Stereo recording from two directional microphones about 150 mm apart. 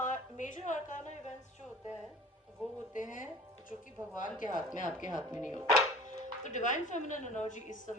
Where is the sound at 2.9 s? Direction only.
60° left (ahead or behind).